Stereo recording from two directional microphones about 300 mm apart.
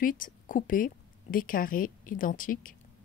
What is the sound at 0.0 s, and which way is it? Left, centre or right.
Speech, left.